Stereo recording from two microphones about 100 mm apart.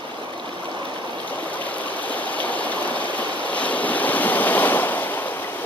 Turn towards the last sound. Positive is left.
turn(degrees=20)  # may be behind; listen again after turning